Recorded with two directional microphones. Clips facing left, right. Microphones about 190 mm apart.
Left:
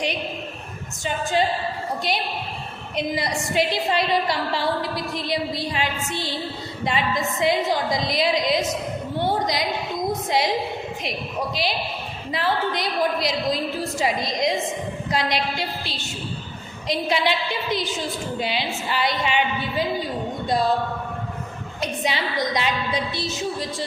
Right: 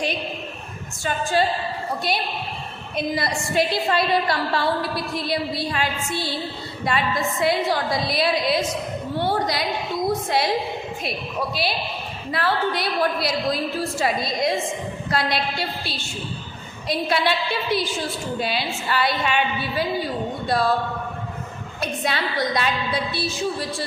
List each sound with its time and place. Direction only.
1.0 s a woman's voice: 20° left (ahead or behind)
2.9 s a woman's voice: 15° left (ahead or behind)
9.1 s a sound: 20° left (ahead or behind)
10.2 s a woman's voice: 15° left (ahead or behind)
21.8 s a woman's voice: 15° left (ahead or behind)